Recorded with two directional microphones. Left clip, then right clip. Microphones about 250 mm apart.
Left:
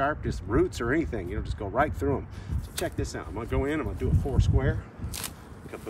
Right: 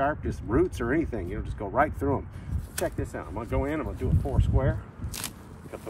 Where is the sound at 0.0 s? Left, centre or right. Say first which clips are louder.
Even; centre.